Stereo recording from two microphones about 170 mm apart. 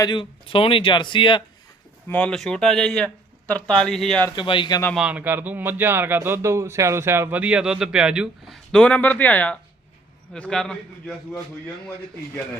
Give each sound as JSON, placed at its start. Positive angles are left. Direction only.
{"t": 0.0, "sound": "speech", "side_deg": 25}
{"t": 2.0, "sound": "speech", "side_deg": 10}
{"t": 4.4, "sound": "speech", "side_deg": 30}
{"t": 4.9, "sound": "speech", "side_deg": -10}